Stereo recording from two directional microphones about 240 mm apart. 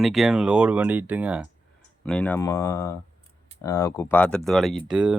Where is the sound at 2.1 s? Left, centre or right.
Centre.